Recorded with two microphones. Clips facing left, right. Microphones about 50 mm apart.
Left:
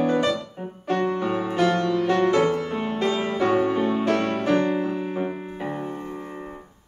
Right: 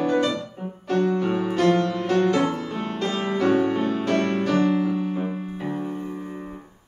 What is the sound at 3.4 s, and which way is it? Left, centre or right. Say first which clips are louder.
Music: right 1 dB; centre.